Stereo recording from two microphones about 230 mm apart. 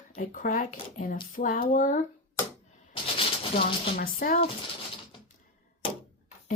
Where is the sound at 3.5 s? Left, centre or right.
Left.